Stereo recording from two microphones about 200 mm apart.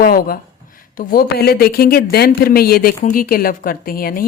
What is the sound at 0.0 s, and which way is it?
Speech, 45° left (ahead or behind).